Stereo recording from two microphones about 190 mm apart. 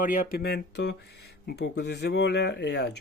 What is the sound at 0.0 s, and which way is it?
Speech, 50° left (ahead or behind).